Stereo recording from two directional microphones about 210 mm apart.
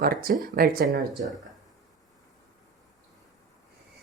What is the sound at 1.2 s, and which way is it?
Speech, 55° right (ahead or behind).